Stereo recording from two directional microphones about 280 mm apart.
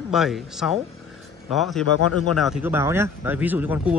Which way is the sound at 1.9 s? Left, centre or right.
Left.